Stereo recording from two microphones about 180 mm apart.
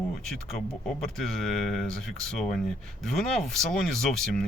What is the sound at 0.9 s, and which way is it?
Speech, 5° left (ahead or behind).